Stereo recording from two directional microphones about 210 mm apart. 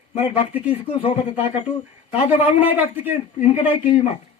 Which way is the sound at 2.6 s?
10° right (ahead or behind).